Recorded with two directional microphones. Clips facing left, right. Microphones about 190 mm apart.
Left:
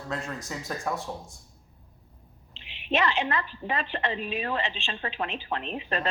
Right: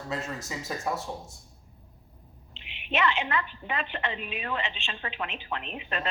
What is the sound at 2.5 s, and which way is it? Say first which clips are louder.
A woman's voice: left 4 dB; 35° left (ahead or behind).